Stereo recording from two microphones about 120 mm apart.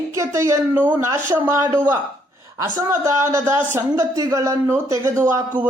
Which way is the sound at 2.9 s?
25° right (ahead or behind).